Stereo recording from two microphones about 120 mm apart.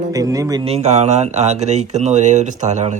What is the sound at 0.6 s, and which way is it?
Speech, 60° right (ahead or behind).